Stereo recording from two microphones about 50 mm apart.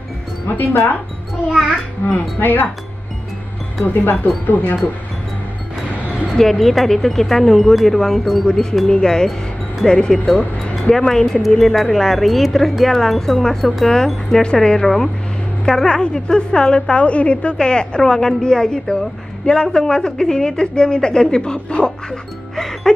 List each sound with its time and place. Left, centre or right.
0.5 s speech: left
2.1 s speech: left
3.8 s speech: left
6.2 s speech: centre
8.5 s a woman's voice: centre
22.6 s music: centre